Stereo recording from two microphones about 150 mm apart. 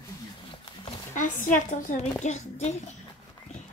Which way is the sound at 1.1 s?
60° left (ahead or behind).